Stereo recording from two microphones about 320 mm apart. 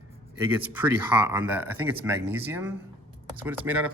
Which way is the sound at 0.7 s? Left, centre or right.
Centre.